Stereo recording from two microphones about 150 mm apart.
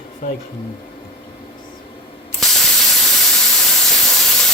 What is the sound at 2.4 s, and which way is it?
Steam, centre (ahead or behind).